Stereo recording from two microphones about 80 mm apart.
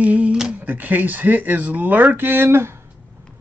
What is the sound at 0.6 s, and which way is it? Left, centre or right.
Speech, right.